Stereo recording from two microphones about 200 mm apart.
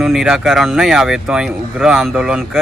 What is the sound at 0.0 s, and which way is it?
Speech, centre (ahead or behind).